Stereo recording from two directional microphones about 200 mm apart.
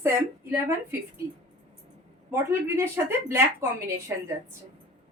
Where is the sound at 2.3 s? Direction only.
10° right (ahead or behind).